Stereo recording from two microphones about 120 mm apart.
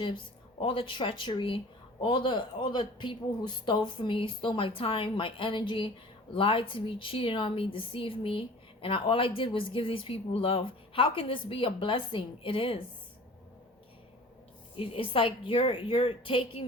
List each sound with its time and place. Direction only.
0.6 s speech: 50° left (ahead or behind)
14.8 s speech: 45° left (ahead or behind)